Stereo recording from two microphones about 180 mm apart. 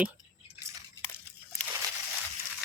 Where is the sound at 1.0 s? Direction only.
10° left (ahead or behind).